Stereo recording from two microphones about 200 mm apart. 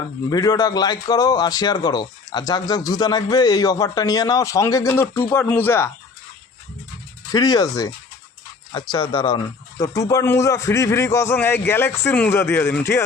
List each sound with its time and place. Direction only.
0.3 s a man's voice: 20° left (ahead or behind)
7.3 s a man's voice: 20° left (ahead or behind)